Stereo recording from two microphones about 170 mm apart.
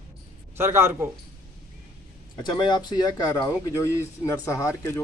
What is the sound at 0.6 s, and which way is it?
Speech, 15° right (ahead or behind).